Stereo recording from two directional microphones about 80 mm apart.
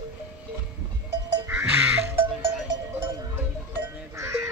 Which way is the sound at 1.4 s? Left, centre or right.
Right.